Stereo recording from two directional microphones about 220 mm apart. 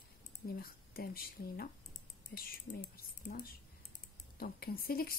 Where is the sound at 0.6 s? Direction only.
45° left (ahead or behind).